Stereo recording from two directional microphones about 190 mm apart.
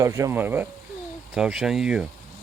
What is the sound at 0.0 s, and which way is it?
Speech, 15° right (ahead or behind).